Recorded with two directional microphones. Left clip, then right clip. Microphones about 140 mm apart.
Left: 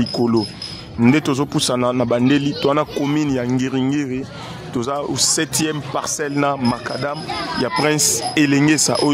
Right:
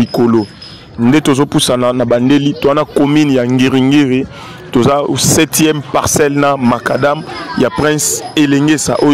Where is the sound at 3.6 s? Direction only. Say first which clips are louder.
Right 11 dB; 80° right.